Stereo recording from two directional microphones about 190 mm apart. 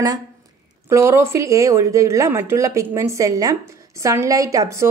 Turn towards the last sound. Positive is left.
turn(degrees=-15)  # may be behind; listen again after turning